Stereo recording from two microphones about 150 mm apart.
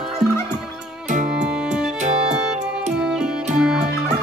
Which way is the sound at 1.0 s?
55° right (ahead or behind).